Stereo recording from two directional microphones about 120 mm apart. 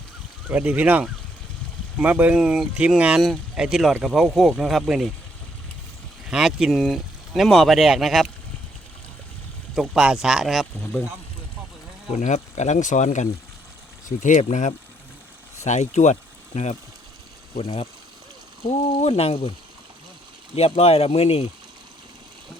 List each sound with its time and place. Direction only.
0.5 s speech: 15° right (ahead or behind)
6.3 s speech: 5° right (ahead or behind)
9.7 s speech: 5° right (ahead or behind)
12.1 s speech: 80° left
15.6 s speech: 75° left (ahead or behind)
17.6 s speech: 55° left (ahead or behind)
20.6 s speech: 55° left (ahead or behind)